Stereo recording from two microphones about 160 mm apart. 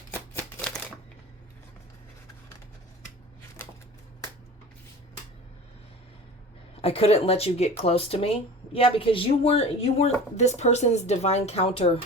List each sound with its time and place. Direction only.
0.1 s shuffling cards: 10° left (ahead or behind)
6.8 s speech: 40° left (ahead or behind)